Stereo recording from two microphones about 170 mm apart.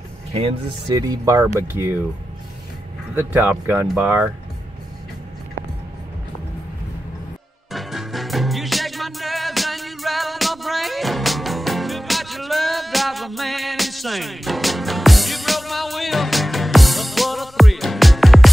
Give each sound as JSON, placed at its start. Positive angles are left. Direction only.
{"t": 0.3, "sound": "speech", "side_deg": -35}
{"t": 0.8, "sound": "speech", "side_deg": -20}
{"t": 3.2, "sound": "speech", "side_deg": -10}
{"t": 7.7, "sound": "music", "side_deg": 0}